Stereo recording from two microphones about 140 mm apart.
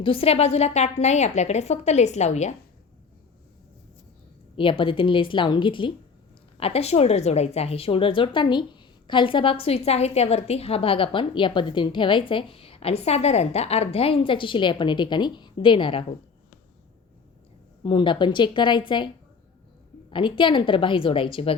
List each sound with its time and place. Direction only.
0.0 s a woman's voice: 40° left (ahead or behind)
4.5 s a woman's voice: 40° left (ahead or behind)
17.8 s a woman's voice: 35° left (ahead or behind)